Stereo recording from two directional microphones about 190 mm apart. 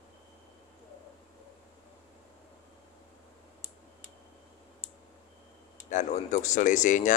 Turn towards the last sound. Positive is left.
turn(degrees=40)  # may be behind; listen again after turning